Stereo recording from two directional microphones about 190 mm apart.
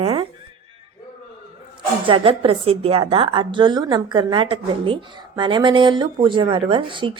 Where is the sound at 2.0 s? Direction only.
30° right (ahead or behind).